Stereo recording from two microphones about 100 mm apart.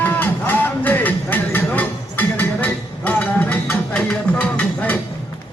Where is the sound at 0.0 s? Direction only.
20° left (ahead or behind).